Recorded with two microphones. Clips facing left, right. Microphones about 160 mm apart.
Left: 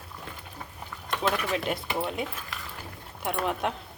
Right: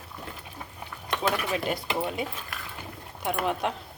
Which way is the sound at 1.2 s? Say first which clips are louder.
Even; centre (ahead or behind).